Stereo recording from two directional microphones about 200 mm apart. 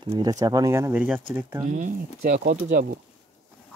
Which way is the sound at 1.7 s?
40° right (ahead or behind).